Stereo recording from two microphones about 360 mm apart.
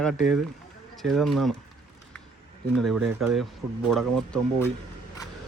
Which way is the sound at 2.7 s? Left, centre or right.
Centre.